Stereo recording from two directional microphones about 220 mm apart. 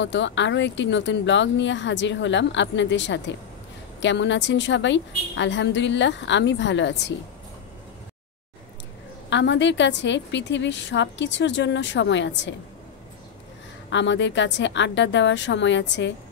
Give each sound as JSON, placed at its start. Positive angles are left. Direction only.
{"t": 0.0, "sound": "speech", "side_deg": 55}
{"t": 9.3, "sound": "speech", "side_deg": 55}
{"t": 13.8, "sound": "speech", "side_deg": 55}